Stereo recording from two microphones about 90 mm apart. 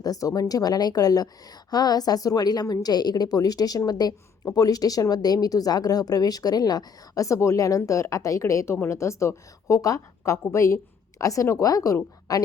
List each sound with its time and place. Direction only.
0.0 s a woman's voice: 40° left (ahead or behind)